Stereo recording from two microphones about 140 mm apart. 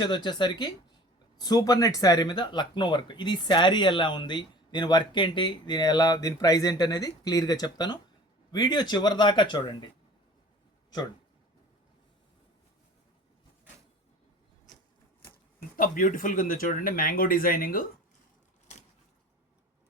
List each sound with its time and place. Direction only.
0.0 s speech: 30° left (ahead or behind)
15.7 s speech: 80° left